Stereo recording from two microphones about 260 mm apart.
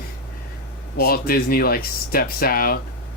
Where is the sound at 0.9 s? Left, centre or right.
Left.